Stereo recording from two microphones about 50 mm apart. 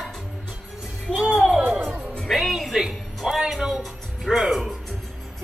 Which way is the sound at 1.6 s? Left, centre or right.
Right.